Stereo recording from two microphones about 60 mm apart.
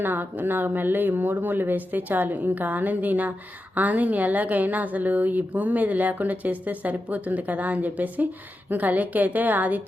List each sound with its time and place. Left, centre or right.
0.0 s a woman's voice: right